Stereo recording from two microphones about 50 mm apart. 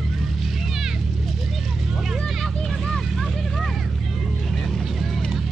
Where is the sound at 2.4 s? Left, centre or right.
Centre.